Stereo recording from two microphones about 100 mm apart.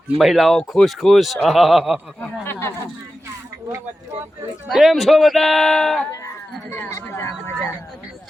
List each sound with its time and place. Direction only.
0.2 s speech: centre (ahead or behind)
2.4 s speech: 25° left (ahead or behind)
4.7 s speech: centre (ahead or behind)
6.7 s speech: 25° left (ahead or behind)